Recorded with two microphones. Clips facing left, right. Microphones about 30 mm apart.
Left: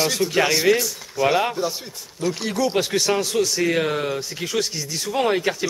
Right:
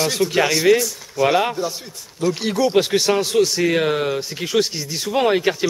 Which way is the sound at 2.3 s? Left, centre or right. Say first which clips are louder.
Right 5 dB; centre.